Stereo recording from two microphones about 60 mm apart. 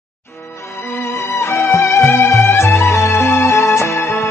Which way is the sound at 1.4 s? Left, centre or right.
Left.